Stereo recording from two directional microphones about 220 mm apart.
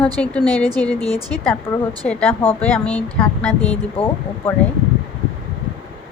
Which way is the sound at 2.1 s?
10° left (ahead or behind).